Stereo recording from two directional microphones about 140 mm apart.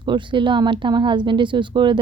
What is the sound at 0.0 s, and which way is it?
Speech, 35° right (ahead or behind).